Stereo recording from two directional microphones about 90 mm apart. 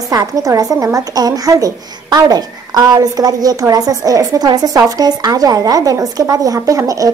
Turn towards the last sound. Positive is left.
turn(degrees=-40)  # may be behind; listen again after turning